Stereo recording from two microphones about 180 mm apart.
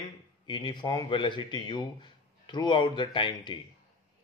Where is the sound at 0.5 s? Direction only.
25° left (ahead or behind).